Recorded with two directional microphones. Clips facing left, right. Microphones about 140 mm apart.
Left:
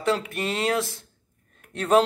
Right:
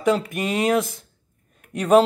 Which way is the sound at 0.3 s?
15° right (ahead or behind).